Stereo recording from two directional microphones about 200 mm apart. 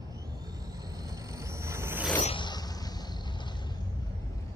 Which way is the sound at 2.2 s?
25° left (ahead or behind).